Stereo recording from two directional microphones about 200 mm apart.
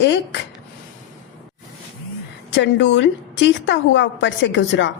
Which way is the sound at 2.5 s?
60° left (ahead or behind).